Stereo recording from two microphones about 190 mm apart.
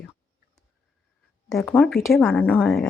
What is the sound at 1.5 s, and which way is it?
A woman's voice, 5° left (ahead or behind).